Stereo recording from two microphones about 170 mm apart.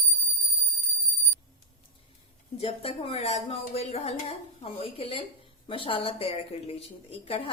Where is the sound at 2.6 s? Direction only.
35° left (ahead or behind).